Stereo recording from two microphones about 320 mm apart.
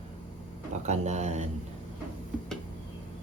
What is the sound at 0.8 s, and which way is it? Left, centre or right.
Speech, right.